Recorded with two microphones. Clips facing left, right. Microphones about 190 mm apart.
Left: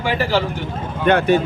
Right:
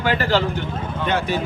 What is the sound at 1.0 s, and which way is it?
Speech, 60° left (ahead or behind).